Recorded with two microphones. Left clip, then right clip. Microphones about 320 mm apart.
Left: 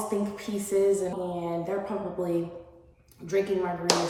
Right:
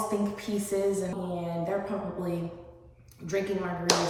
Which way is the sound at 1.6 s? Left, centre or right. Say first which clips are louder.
Even; centre.